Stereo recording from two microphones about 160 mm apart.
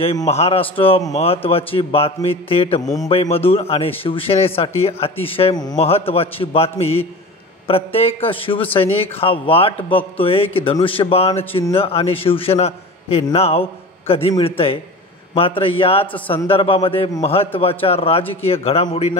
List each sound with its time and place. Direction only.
0.0 s a man's voice: 40° left (ahead or behind)